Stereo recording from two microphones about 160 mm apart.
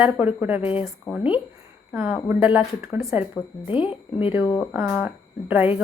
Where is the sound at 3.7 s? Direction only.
30° left (ahead or behind).